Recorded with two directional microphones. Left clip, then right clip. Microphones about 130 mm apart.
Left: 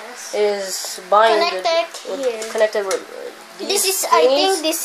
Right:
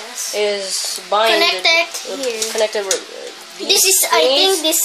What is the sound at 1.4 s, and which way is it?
Speech, 50° right (ahead or behind).